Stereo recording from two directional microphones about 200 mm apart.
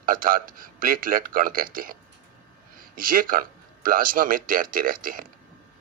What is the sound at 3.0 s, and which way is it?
Speech, 45° right (ahead or behind).